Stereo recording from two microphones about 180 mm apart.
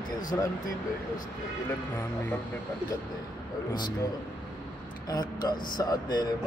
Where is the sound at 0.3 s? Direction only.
10° left (ahead or behind).